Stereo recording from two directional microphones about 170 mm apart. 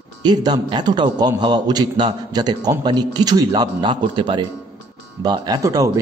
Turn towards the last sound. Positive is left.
turn(degrees=-20)  # may be behind; listen again after turning